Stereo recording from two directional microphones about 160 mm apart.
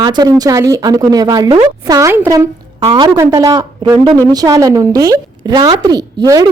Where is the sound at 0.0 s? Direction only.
25° right (ahead or behind).